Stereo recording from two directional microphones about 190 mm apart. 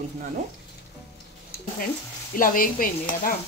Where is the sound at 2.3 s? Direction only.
45° left (ahead or behind).